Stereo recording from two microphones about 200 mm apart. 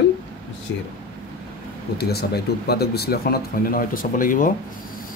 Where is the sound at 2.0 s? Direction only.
55° left (ahead or behind).